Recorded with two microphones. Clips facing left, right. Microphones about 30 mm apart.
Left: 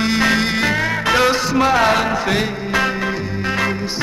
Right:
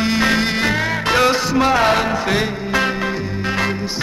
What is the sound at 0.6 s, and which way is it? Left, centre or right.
Music, right.